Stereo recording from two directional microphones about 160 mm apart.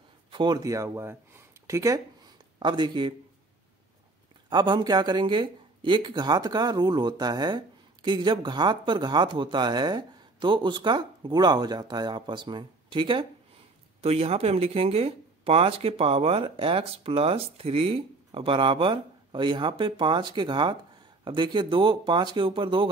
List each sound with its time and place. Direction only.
0.3 s speech: 30° right (ahead or behind)
4.5 s speech: 25° right (ahead or behind)